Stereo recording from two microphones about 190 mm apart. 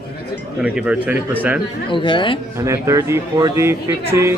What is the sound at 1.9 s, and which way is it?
Speech, 25° left (ahead or behind).